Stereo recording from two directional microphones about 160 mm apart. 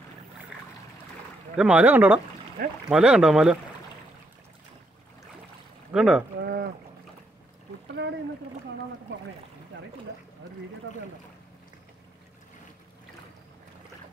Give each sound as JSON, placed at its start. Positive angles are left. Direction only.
{"t": 1.6, "sound": "speech", "side_deg": -10}
{"t": 5.9, "sound": "speech", "side_deg": -5}
{"t": 6.4, "sound": "boat", "side_deg": -80}